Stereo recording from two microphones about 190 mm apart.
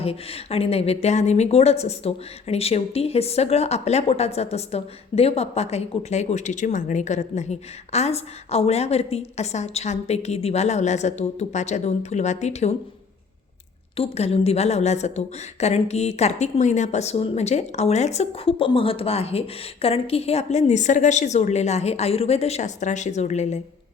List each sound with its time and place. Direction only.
0.0 s a woman's voice: 30° left (ahead or behind)
13.9 s a woman's voice: 30° left (ahead or behind)